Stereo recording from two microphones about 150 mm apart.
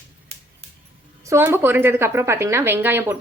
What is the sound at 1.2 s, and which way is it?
A woman's voice, 15° right (ahead or behind).